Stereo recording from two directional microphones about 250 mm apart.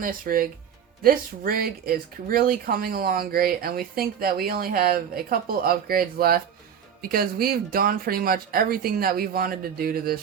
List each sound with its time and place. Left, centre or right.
0.0 s speech: right